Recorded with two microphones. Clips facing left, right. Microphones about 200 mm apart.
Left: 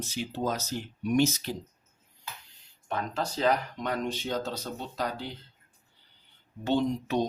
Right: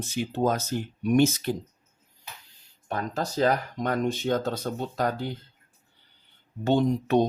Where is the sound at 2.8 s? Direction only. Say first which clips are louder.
Right 2 dB; 40° right (ahead or behind).